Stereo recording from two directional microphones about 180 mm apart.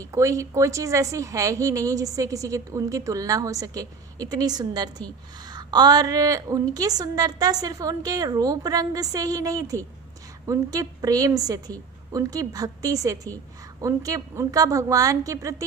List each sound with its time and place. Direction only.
0.0 s a woman's voice: 15° right (ahead or behind)